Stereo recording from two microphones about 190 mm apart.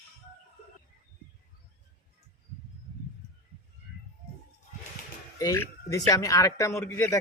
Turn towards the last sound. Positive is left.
turn(degrees=10)  # may be behind; listen again after turning